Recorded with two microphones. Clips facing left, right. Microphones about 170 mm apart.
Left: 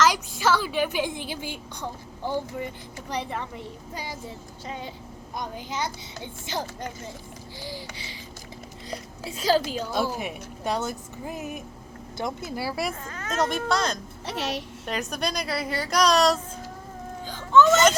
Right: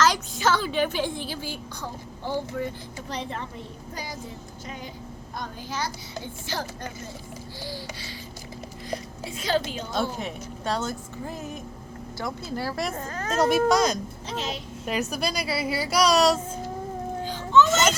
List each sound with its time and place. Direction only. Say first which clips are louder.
0.0 s a woman's voice: even; 10° left (ahead or behind)
5.4 s a child's voice: left 1 dB; 20° left (ahead or behind)
9.2 s a woman's voice: left 4 dB; 35° left (ahead or behind)
9.9 s a woman's voice: right 1 dB; 10° left (ahead or behind)
12.5 s a woman's voice: right 1 dB; 5° left (ahead or behind)
13.0 s a woman's voice: right 3 dB; 40° right (ahead or behind)
13.5 s speech: right 5 dB; 10° right (ahead or behind)
14.3 s a woman's voice: left 2 dB; 75° left (ahead or behind)
14.8 s a woman's voice: right 2 dB; 5° right (ahead or behind)